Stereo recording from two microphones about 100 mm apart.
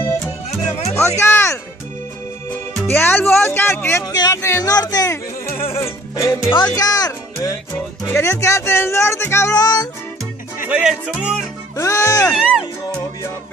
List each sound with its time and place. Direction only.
0.5 s music: 90° left
0.9 s music: 25° left (ahead or behind)
2.9 s speech: 20° left (ahead or behind)
3.4 s a sound: 25° left (ahead or behind)
4.0 s music: 40° left (ahead or behind)
4.4 s speech: 25° left (ahead or behind)
4.6 s speech: 40° left (ahead or behind)
5.8 s music: 30° left (ahead or behind)
6.7 s speech: 35° left (ahead or behind)
9.6 s music: 40° left (ahead or behind)
10.7 s speech: 10° right (ahead or behind)
11.7 s music: 30° left (ahead or behind)
12.4 s speech: 10° right (ahead or behind)